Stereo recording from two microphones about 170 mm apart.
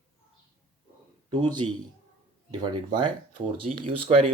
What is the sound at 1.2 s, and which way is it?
A man's voice, 25° right (ahead or behind).